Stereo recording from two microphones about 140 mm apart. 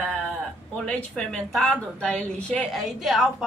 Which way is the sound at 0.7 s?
5° left (ahead or behind).